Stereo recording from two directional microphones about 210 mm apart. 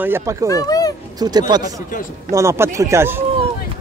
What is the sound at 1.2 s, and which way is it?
Speech, 20° right (ahead or behind).